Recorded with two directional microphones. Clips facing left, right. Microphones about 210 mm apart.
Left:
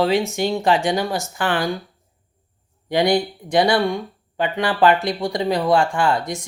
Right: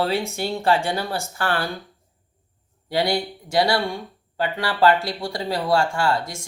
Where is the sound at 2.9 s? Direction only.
20° left (ahead or behind).